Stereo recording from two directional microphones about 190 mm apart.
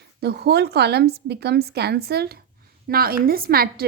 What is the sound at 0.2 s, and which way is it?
A woman's voice, 60° right (ahead or behind).